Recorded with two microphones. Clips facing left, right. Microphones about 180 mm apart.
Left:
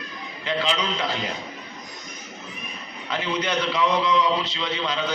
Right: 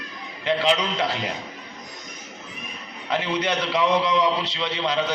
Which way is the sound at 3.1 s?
70° right (ahead or behind).